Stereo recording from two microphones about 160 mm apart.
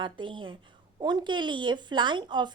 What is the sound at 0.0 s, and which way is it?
A woman's voice, 30° right (ahead or behind).